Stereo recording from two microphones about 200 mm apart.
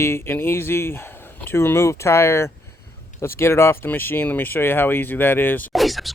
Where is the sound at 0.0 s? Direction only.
10° left (ahead or behind).